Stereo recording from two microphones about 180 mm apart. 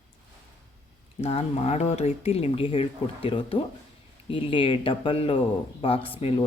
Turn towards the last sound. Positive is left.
turn(degrees=30)  # may be behind; listen again after turning